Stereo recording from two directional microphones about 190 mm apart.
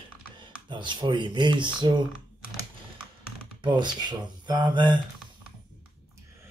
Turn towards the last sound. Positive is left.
turn(degrees=-25)  # may be behind; listen again after turning